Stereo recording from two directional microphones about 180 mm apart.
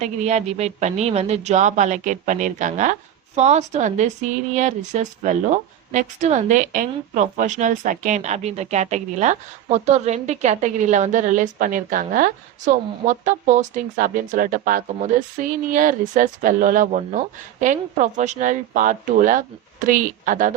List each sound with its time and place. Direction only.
0.0 s speech: 40° right (ahead or behind)